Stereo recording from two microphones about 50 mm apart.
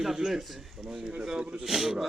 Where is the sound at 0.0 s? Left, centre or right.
Centre.